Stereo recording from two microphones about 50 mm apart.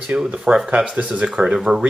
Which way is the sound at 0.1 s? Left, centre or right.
Centre.